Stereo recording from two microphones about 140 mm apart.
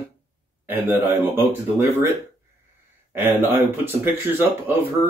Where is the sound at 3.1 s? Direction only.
15° right (ahead or behind).